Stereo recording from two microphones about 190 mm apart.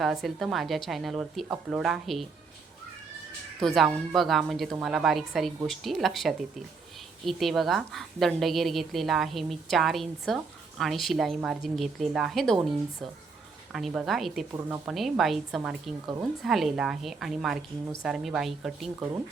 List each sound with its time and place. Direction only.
0.0 s a woman's voice: centre (ahead or behind)
3.6 s a woman's voice: centre (ahead or behind)
13.7 s a woman's voice: centre (ahead or behind)
18.9 s speech: 15° right (ahead or behind)